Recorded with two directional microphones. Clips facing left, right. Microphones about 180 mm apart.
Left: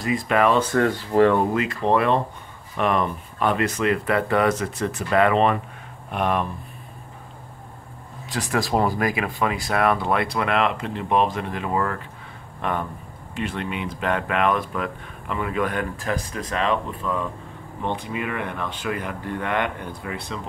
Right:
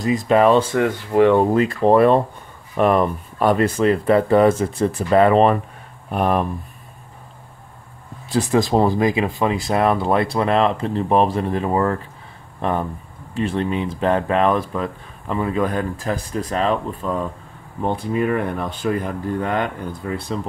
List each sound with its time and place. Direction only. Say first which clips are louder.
0.1 s speech: right 5 dB; 35° right (ahead or behind)
0.7 s speech: right 1 dB; 10° right (ahead or behind)
1.5 s speech: right 6 dB; 35° right (ahead or behind)
8.3 s speech: right 6 dB; 25° right (ahead or behind)
13.3 s speech: right 7 dB; 30° right (ahead or behind)